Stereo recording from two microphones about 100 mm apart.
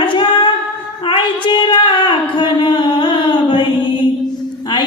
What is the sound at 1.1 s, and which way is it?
Child singing, 50° left (ahead or behind).